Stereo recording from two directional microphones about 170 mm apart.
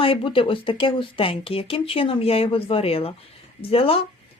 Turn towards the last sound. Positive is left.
turn(degrees=35)  # may be behind; listen again after turning